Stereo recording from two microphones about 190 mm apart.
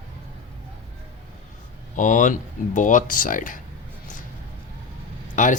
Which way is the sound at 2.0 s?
40° left (ahead or behind).